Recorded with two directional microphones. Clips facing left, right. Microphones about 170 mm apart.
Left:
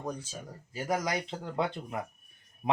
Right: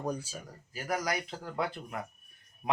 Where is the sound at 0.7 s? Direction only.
25° left (ahead or behind).